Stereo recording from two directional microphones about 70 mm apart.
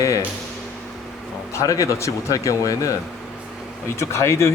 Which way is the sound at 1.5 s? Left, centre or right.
Left.